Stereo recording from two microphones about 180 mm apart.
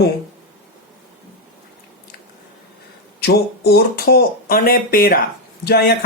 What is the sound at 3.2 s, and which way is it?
Speech, 60° left (ahead or behind).